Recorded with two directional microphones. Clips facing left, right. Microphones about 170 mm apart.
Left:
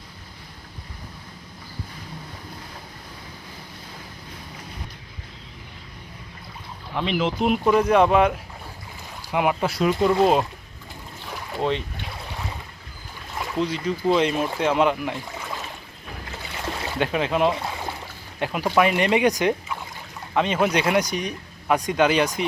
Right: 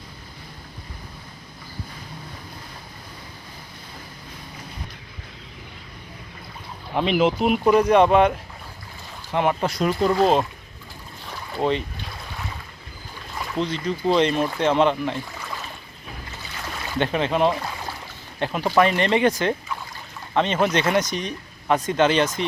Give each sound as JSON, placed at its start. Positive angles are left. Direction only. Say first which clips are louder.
{"t": 7.0, "sound": "speech", "louder": "right 3 dB", "side_deg": -10}
{"t": 9.3, "sound": "speech", "louder": "even", "side_deg": 5}
{"t": 13.6, "sound": "speech", "louder": "even", "side_deg": 5}
{"t": 16.6, "sound": "boat", "louder": "left 1 dB", "side_deg": 25}
{"t": 17.0, "sound": "speech", "louder": "right 1 dB", "side_deg": 5}
{"t": 17.5, "sound": "a sound", "louder": "even", "side_deg": 25}
{"t": 18.3, "sound": "speech", "louder": "right 1 dB", "side_deg": 5}